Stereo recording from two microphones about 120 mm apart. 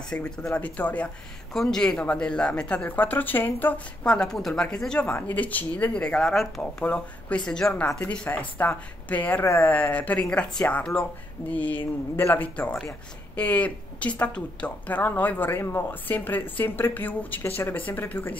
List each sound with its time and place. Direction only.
0.1 s speech: 5° left (ahead or behind)